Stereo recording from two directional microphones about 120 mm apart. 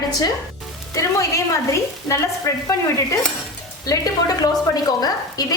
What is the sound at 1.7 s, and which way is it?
Speech, 25° left (ahead or behind).